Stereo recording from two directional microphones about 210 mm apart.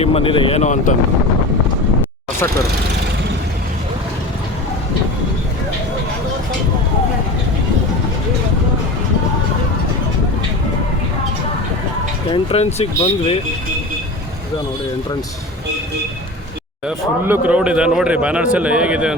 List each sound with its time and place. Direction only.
0.0 s speech: 25° left (ahead or behind)
12.3 s speech: 30° left (ahead or behind)
16.8 s speech: 10° right (ahead or behind)